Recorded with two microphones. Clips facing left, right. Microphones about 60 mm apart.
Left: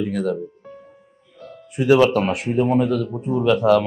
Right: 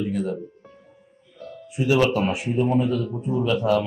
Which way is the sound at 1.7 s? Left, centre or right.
Left.